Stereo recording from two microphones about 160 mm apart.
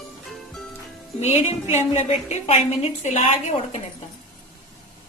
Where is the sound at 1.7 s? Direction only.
45° left (ahead or behind).